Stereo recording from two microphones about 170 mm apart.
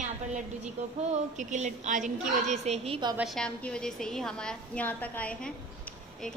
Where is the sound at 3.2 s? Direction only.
Centre (ahead or behind).